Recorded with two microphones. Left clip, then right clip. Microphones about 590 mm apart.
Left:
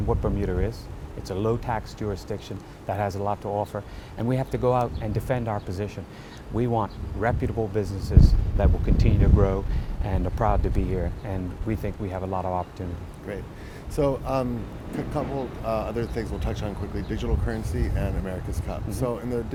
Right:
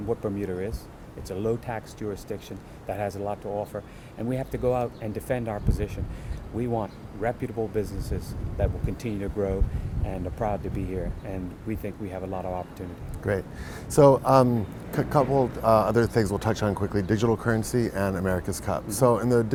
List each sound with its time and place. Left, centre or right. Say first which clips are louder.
0.1 s speech: left 2 dB; centre
13.2 s speech: right 8 dB; right